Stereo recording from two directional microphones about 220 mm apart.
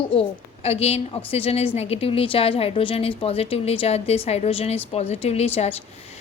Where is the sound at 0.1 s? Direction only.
25° left (ahead or behind).